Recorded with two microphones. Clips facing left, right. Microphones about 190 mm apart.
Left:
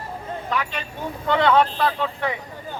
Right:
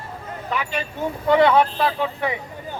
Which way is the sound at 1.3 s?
10° right (ahead or behind).